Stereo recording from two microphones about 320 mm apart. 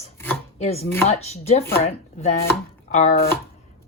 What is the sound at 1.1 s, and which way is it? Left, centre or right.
Speech, centre.